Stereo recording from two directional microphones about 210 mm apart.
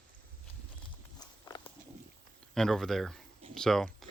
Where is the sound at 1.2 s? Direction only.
20° left (ahead or behind).